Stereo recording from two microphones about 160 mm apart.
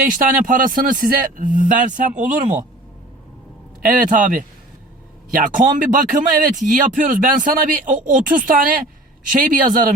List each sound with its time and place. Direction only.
0.2 s speech: 60° right (ahead or behind)
3.8 s speech: 55° right (ahead or behind)